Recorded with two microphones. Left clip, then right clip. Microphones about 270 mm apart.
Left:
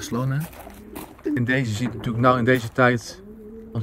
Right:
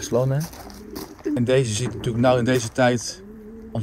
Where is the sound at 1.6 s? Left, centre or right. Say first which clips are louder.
Right 2 dB; right.